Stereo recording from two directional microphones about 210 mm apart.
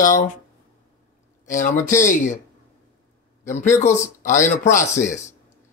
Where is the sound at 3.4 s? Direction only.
35° left (ahead or behind).